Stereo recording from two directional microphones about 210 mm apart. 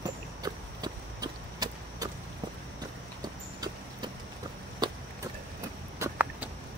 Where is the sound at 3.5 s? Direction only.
20° right (ahead or behind).